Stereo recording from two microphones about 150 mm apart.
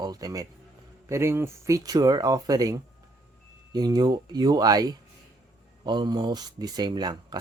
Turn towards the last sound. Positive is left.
turn(degrees=-30)  # may be behind; listen again after turning